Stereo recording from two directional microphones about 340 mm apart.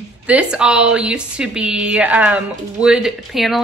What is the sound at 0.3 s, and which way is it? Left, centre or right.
Speech, centre.